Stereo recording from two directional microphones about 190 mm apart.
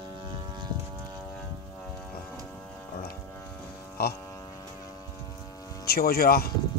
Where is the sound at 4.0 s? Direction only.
55° left (ahead or behind).